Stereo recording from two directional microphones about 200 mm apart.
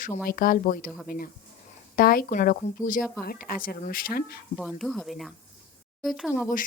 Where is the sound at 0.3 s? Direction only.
45° left (ahead or behind).